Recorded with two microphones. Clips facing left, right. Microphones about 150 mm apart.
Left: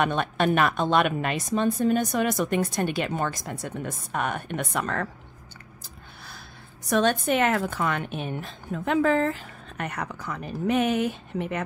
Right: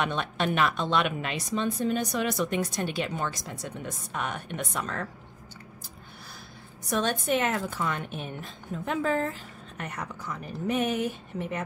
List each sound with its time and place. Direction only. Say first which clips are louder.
0.0 s a woman's voice: left 5 dB; 50° left (ahead or behind)
6.9 s a woman's voice: left 4 dB; 70° left (ahead or behind)